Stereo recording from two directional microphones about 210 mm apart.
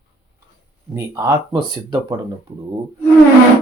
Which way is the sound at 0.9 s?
10° right (ahead or behind).